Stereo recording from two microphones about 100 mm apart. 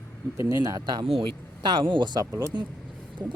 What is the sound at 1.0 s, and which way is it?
A man's voice, 60° right (ahead or behind).